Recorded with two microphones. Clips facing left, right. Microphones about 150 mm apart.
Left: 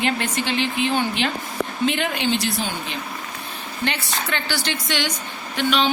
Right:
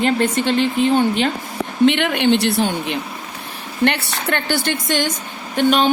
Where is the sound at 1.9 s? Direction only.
70° right (ahead or behind).